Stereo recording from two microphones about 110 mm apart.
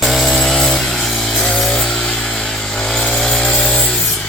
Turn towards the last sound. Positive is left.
turn(degrees=5)  # may be behind; listen again after turning